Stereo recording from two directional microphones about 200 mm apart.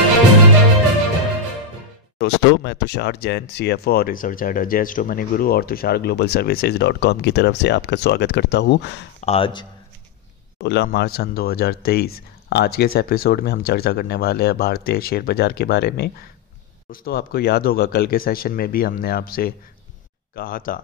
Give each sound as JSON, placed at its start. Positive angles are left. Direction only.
{"t": 2.1, "sound": "speech", "side_deg": 60}
{"t": 9.2, "sound": "speech", "side_deg": 30}
{"t": 10.6, "sound": "speech", "side_deg": 55}